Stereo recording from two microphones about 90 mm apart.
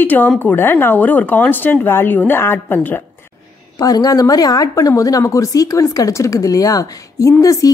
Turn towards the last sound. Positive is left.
turn(degrees=40)  # may be behind; listen again after turning